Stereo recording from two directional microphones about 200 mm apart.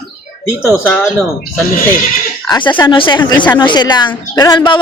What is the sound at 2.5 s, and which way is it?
A woman's voice, 25° left (ahead or behind).